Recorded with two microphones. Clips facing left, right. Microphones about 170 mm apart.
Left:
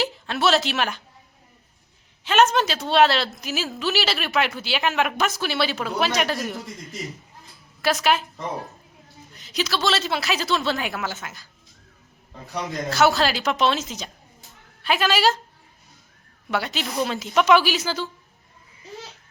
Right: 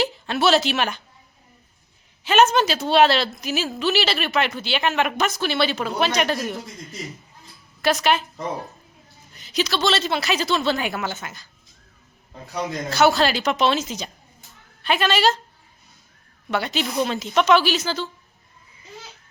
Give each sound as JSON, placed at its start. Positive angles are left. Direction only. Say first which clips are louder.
{"t": 0.0, "sound": "a woman's voice", "louder": "right 2 dB", "side_deg": 0}
{"t": 2.2, "sound": "a woman's voice", "louder": "right 2 dB", "side_deg": 0}
{"t": 9.3, "sound": "a woman's voice", "louder": "right 2 dB", "side_deg": 0}
{"t": 12.6, "sound": "a woman's voice", "louder": "right 1 dB", "side_deg": 0}
{"t": 16.5, "sound": "a woman's voice", "louder": "right 2 dB", "side_deg": 0}